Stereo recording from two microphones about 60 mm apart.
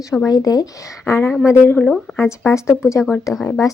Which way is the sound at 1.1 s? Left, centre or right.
Left.